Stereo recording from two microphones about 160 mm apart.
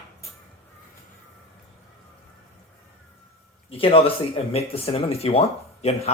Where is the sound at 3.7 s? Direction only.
35° left (ahead or behind).